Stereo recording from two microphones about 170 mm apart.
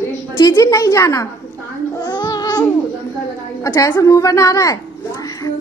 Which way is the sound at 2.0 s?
25° left (ahead or behind).